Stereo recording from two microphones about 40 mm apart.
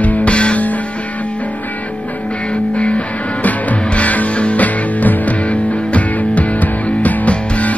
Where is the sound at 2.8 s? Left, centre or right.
Left.